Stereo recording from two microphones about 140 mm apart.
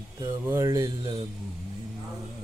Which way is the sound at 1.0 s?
35° right (ahead or behind).